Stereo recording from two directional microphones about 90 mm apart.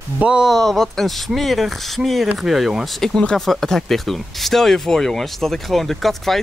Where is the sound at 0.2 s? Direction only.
10° right (ahead or behind).